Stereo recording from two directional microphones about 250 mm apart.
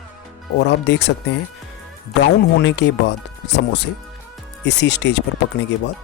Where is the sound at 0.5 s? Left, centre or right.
Left.